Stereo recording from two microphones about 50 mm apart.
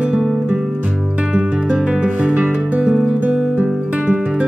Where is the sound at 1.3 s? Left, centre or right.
Right.